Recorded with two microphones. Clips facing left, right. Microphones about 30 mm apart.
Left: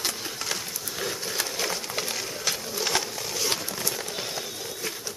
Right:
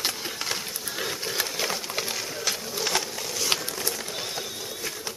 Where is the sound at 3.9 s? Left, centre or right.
Centre.